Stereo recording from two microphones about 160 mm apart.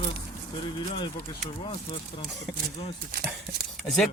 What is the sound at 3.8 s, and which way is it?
Speech, centre (ahead or behind).